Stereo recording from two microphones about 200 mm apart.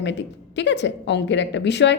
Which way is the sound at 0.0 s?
60° left (ahead or behind).